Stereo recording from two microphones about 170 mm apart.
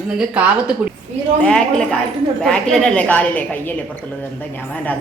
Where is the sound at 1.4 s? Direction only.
5° left (ahead or behind).